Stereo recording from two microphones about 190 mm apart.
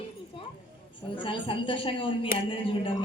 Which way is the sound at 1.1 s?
25° left (ahead or behind).